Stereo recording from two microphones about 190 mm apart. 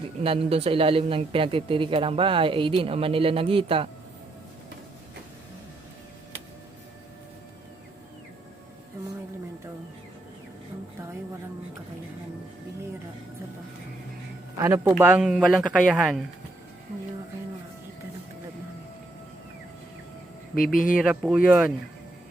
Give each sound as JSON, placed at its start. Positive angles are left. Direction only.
{"t": 0.2, "sound": "speech", "side_deg": -30}
{"t": 14.6, "sound": "speech", "side_deg": -10}
{"t": 21.0, "sound": "speech", "side_deg": 0}